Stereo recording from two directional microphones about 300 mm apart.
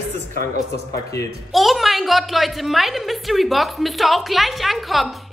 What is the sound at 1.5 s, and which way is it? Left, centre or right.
A woman's voice, centre.